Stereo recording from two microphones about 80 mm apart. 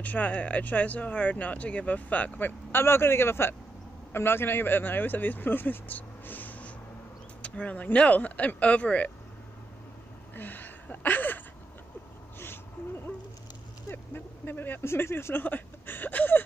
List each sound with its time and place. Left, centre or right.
0.0 s speech: centre
10.3 s speech: left
13.8 s speech: left